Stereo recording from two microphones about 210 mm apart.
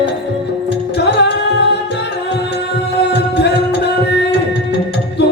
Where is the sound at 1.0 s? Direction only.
55° left (ahead or behind).